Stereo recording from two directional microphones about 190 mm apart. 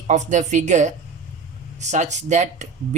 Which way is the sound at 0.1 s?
40° right (ahead or behind).